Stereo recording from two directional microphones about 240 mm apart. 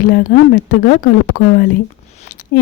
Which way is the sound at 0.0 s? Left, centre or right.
Left.